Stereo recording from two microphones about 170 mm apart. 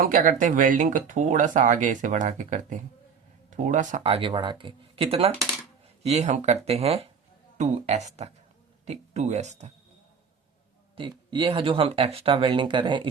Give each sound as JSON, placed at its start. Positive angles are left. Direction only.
{"t": 0.0, "sound": "speech", "side_deg": -55}
{"t": 4.0, "sound": "speech", "side_deg": -30}
{"t": 10.9, "sound": "speech", "side_deg": -30}